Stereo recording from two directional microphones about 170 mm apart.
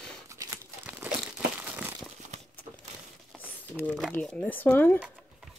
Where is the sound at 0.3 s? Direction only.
15° right (ahead or behind).